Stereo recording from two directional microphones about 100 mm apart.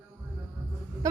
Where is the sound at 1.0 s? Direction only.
35° right (ahead or behind).